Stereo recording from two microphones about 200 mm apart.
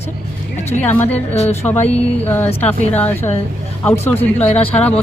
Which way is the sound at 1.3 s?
35° left (ahead or behind).